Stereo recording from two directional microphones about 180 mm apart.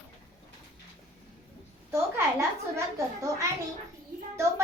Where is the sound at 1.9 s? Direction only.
15° right (ahead or behind).